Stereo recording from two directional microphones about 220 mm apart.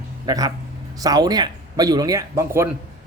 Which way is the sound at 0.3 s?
15° right (ahead or behind).